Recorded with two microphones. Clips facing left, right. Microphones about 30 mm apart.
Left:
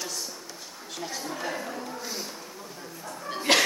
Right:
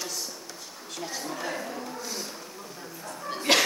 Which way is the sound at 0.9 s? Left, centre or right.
Centre.